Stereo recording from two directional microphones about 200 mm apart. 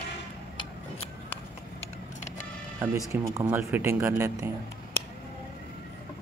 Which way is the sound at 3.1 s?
15° right (ahead or behind).